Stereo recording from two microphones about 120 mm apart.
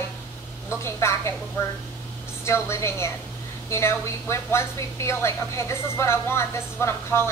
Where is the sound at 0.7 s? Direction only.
20° left (ahead or behind).